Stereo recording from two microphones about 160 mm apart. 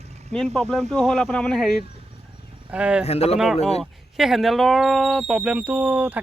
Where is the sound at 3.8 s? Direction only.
Centre (ahead or behind).